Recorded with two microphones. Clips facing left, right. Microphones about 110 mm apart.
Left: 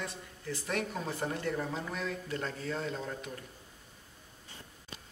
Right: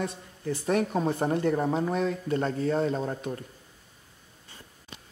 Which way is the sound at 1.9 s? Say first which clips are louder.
Right 10 dB; 30° right (ahead or behind).